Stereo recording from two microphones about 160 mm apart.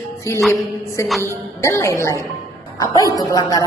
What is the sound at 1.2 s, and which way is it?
A woman's voice, 15° left (ahead or behind).